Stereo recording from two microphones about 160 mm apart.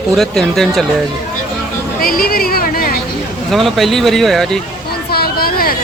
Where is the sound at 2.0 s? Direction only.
65° left (ahead or behind).